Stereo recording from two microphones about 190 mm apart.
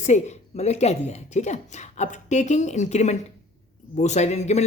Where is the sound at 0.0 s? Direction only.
35° left (ahead or behind).